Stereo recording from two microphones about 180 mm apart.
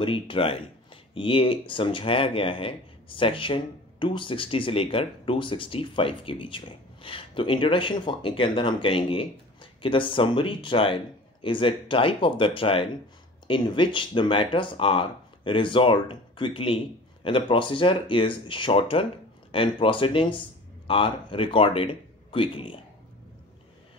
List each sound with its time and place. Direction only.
0.0 s speech: 30° left (ahead or behind)